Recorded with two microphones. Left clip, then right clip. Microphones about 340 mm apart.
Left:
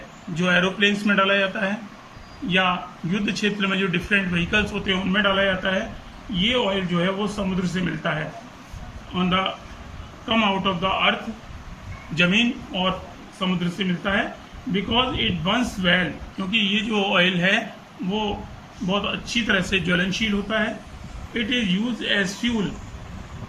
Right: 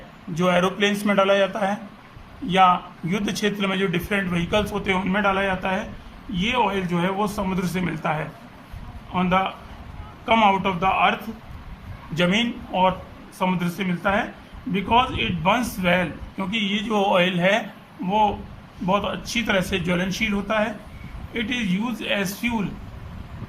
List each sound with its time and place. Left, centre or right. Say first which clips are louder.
0.3 s a man's voice: even; centre
9.1 s a man's voice: right 1 dB; centre
12.1 s a man's voice: left 2 dB; centre
18.9 s a man's voice: right 2 dB; centre